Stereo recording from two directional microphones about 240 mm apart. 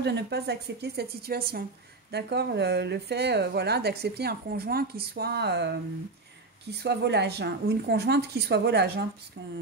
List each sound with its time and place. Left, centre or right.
0.0 s a woman's voice: right
6.8 s a woman's voice: right